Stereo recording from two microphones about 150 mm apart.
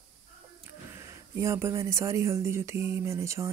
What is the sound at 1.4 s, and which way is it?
Speech, 20° right (ahead or behind).